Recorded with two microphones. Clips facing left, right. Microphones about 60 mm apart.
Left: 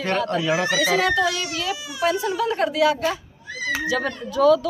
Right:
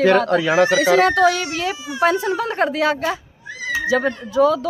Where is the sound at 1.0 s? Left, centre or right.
Right.